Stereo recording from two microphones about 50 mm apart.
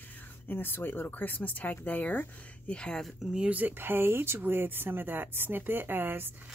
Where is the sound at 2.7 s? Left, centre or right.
Centre.